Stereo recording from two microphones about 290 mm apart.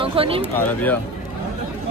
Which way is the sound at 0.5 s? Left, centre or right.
Centre.